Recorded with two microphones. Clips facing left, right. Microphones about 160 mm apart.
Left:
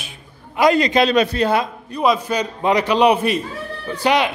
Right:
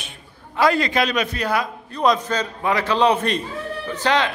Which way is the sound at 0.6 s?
20° left (ahead or behind).